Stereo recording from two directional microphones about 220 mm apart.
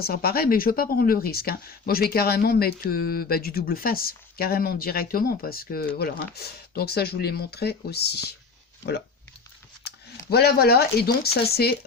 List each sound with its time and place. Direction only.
0.0 s speech: 45° left (ahead or behind)
10.2 s speech: 45° left (ahead or behind)